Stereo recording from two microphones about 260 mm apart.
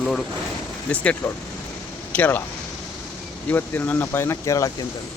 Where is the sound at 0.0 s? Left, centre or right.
Centre.